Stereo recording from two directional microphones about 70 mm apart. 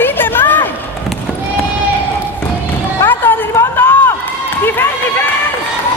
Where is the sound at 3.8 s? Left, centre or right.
Left.